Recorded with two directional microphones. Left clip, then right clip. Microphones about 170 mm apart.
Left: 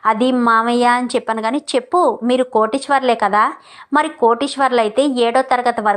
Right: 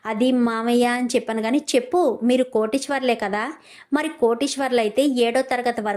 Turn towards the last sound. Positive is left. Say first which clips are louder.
# left 7 dB
turn(degrees=-25)  # may be behind; listen again after turning